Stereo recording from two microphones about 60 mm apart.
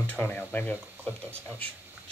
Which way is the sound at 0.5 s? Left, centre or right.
Left.